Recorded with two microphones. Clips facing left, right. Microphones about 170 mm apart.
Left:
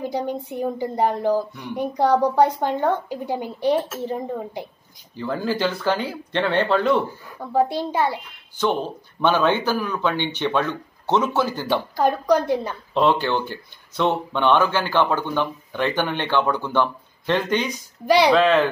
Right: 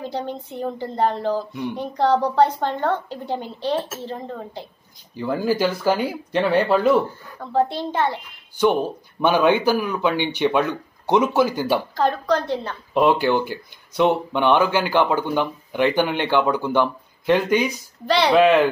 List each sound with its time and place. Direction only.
0.0 s a woman's voice: 10° left (ahead or behind)
1.5 s speech: 15° right (ahead or behind)
1.8 s a woman's voice: 10° left (ahead or behind)
5.1 s speech: 10° right (ahead or behind)
7.5 s a woman's voice: 10° left (ahead or behind)
9.2 s speech: 15° right (ahead or behind)
11.9 s a woman's voice: 10° left (ahead or behind)
12.9 s speech: 10° right (ahead or behind)
18.0 s a woman's voice: 10° left (ahead or behind)
18.3 s speech: 10° right (ahead or behind)